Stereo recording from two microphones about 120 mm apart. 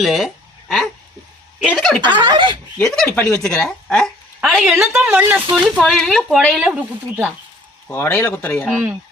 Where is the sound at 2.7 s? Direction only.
5° left (ahead or behind).